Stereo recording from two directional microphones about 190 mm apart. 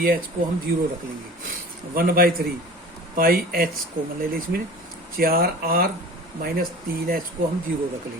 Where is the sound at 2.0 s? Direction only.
50° right (ahead or behind).